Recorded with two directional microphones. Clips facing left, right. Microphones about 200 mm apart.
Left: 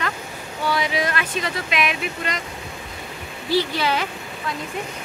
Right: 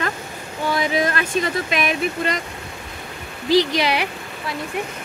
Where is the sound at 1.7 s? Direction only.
45° right (ahead or behind).